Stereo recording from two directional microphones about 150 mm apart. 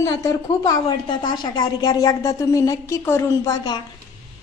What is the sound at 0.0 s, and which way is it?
A woman's voice, 20° left (ahead or behind).